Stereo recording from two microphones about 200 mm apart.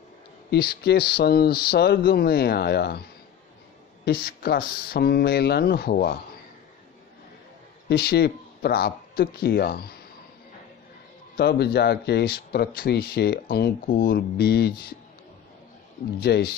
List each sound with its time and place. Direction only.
0.5 s speech: 50° left (ahead or behind)
7.9 s speech: 55° left (ahead or behind)
11.3 s speech: 55° left (ahead or behind)
16.2 s speech: 55° left (ahead or behind)